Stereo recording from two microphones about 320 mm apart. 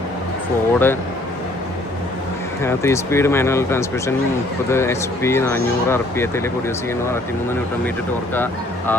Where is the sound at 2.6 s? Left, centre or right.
Centre.